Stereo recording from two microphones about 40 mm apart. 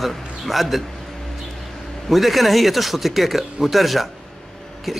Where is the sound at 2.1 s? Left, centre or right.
Centre.